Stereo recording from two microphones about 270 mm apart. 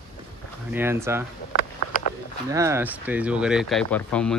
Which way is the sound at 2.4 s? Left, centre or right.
Centre.